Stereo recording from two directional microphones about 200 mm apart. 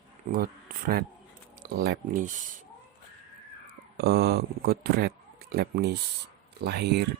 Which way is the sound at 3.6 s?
55° right (ahead or behind).